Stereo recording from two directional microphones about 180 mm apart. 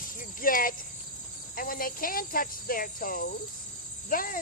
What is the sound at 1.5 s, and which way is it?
Speech, 55° left (ahead or behind).